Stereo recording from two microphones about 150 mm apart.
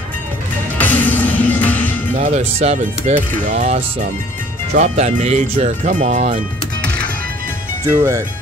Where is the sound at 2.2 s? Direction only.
50° right (ahead or behind).